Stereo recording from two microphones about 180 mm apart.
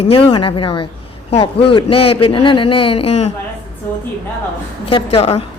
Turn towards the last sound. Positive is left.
turn(degrees=35)  # may be behind; listen again after turning